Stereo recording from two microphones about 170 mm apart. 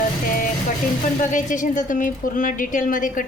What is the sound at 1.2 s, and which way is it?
Speech, 50° left (ahead or behind).